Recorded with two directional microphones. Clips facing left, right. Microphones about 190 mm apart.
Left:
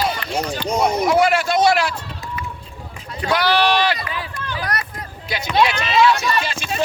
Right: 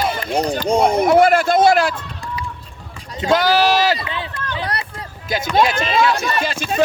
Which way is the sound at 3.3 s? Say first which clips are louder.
Right 3 dB; 45° right (ahead or behind).